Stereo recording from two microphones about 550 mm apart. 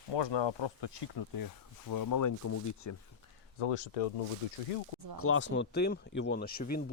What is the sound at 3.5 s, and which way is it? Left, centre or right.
Speech, left.